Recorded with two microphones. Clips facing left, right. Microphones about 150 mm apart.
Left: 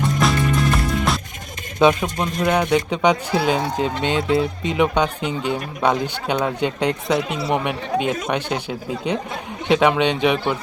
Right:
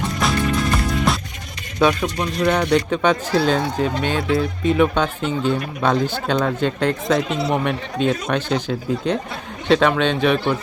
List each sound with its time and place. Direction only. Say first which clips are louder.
0.2 s music: right 1 dB; centre (ahead or behind)
1.8 s speech: left 1 dB; 20° left (ahead or behind)